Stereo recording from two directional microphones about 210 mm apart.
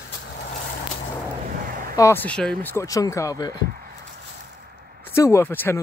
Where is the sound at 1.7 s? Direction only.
40° right (ahead or behind).